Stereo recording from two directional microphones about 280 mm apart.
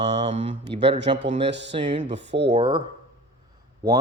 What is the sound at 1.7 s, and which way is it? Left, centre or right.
Speech, right.